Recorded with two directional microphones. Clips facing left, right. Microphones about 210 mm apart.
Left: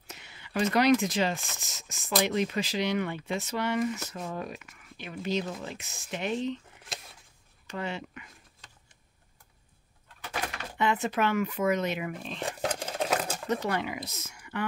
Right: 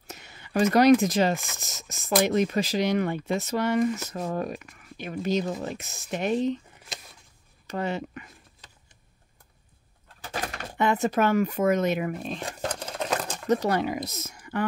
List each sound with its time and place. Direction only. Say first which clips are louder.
0.1 s speech: right 6 dB; 45° right (ahead or behind)
7.6 s speech: right 6 dB; 45° right (ahead or behind)
10.8 s speech: right 4 dB; 45° right (ahead or behind)
12.6 s a sound: even; 5° left (ahead or behind)
13.5 s speech: right 7 dB; 40° right (ahead or behind)